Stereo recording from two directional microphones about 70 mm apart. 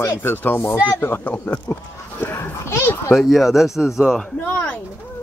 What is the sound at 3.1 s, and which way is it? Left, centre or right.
Speech, centre.